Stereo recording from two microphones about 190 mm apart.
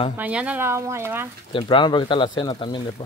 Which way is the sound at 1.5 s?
25° left (ahead or behind).